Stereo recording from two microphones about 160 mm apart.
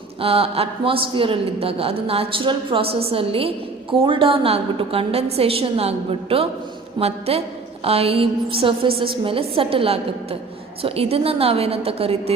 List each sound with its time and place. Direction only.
0.2 s a man's voice: 35° right (ahead or behind)